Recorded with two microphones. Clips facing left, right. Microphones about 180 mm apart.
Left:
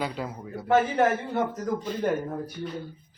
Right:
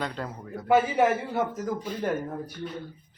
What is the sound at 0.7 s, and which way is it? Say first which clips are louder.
Speech: even; 5° right (ahead or behind).